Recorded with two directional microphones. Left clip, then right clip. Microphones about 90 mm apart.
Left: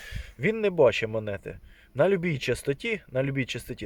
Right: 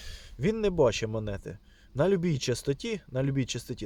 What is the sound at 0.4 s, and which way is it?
Speech, 30° right (ahead or behind).